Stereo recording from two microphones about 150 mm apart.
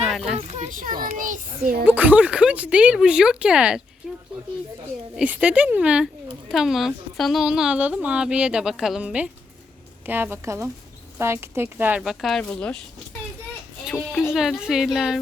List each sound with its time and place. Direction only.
0.1 s children playing: centre (ahead or behind)
0.7 s a child's voice: 65° right (ahead or behind)
1.8 s speech: 10° right (ahead or behind)
5.1 s a woman's voice: 10° right (ahead or behind); by 12.8 s 5° left (ahead or behind)
14.2 s a woman's voice: 5° right (ahead or behind)